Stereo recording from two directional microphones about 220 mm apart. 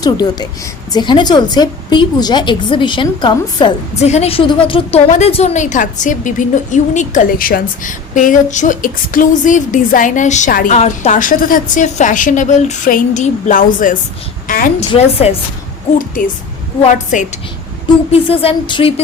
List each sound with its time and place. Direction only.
0.0 s a woman's voice: 20° left (ahead or behind)
16.0 s a woman's voice: 40° left (ahead or behind)